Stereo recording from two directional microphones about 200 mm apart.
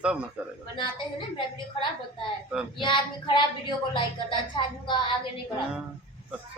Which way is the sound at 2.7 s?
25° left (ahead or behind).